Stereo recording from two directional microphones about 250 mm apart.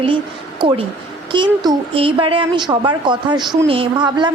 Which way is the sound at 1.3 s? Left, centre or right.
Centre.